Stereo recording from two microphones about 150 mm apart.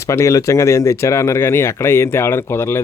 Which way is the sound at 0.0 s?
20° left (ahead or behind).